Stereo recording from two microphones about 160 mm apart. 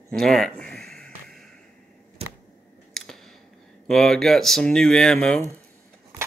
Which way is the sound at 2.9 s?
Centre (ahead or behind).